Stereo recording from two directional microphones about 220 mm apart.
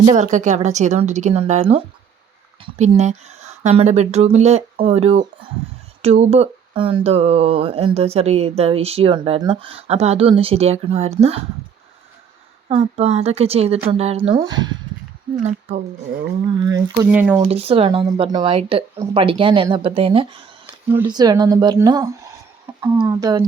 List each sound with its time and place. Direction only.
0.0 s a woman's voice: 35° right (ahead or behind)
12.6 s speech: 30° right (ahead or behind)
15.4 s a woman's voice: 30° right (ahead or behind)
16.6 s speech: 15° right (ahead or behind)
17.1 s speech: 5° right (ahead or behind)
17.5 s speech: 25° right (ahead or behind)